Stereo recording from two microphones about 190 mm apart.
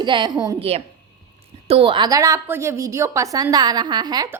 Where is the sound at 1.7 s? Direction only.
25° right (ahead or behind).